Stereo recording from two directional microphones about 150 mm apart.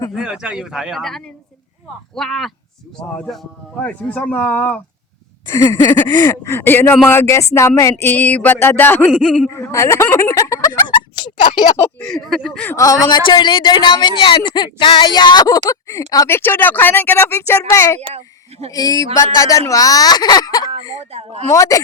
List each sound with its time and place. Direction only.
0.1 s speech: 5° right (ahead or behind)
3.8 s a sound: 10° left (ahead or behind)
5.5 s a woman's voice: 25° left (ahead or behind)
6.1 s a sound: 25° left (ahead or behind); by 9.5 s 5° left (ahead or behind)
9.5 s speech: 20° left (ahead or behind)
11.9 s speech: 5° left (ahead or behind)
12.7 s a woman's voice: 25° left (ahead or behind)
21.0 s a woman's voice: 45° right (ahead or behind)
21.4 s a woman's voice: 20° left (ahead or behind)